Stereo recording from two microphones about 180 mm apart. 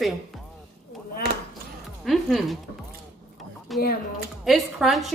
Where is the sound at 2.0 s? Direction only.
Centre (ahead or behind).